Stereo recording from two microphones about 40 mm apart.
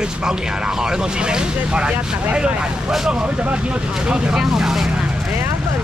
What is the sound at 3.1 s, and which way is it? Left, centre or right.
Speech, right.